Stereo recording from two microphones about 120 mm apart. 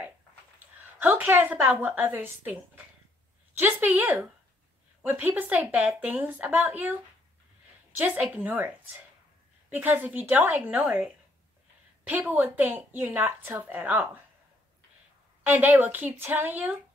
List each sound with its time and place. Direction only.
0.9 s a woman's voice: 15° right (ahead or behind)
8.0 s a woman's voice: 15° right (ahead or behind)
12.1 s a woman's voice: 15° right (ahead or behind)
15.4 s a woman's voice: 15° right (ahead or behind)